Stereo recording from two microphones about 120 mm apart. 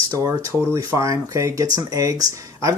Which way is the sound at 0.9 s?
25° right (ahead or behind).